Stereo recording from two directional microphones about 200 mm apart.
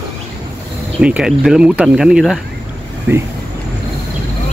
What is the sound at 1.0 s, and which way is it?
Speech, 5° right (ahead or behind).